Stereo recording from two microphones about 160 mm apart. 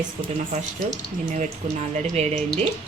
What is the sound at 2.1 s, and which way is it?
Speech, 40° right (ahead or behind).